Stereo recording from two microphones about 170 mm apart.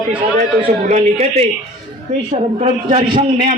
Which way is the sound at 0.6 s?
40° right (ahead or behind).